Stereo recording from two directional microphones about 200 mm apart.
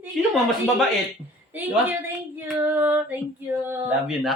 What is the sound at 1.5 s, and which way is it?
Speech, 10° right (ahead or behind).